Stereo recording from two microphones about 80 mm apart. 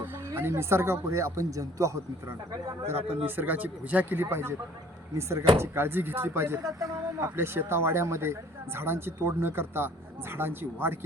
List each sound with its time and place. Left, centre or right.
0.3 s speech: right
2.8 s speech: right
6.7 s speech: right